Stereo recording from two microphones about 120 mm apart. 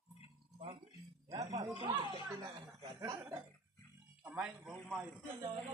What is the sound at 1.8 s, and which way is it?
Speech, 40° right (ahead or behind).